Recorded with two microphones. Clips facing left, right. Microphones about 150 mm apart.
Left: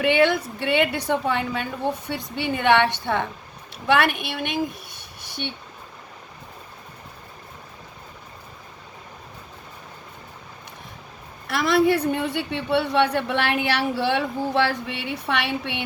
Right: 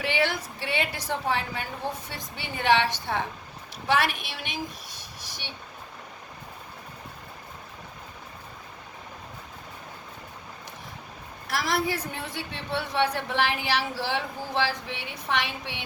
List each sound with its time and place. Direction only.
0.0 s a woman's voice: 60° left (ahead or behind)
11.4 s a woman's voice: 60° left (ahead or behind)